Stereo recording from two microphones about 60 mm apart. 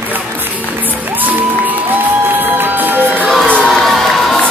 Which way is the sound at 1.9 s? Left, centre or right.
Right.